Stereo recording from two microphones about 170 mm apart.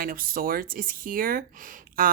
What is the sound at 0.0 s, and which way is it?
Speech, 60° right (ahead or behind).